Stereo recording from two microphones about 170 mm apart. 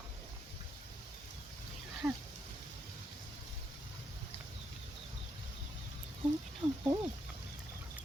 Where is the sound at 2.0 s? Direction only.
15° right (ahead or behind).